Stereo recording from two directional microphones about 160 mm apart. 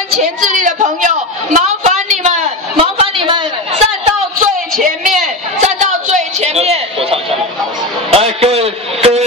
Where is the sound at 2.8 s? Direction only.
35° right (ahead or behind).